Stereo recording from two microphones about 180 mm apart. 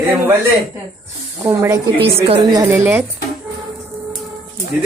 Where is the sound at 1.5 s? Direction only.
15° right (ahead or behind).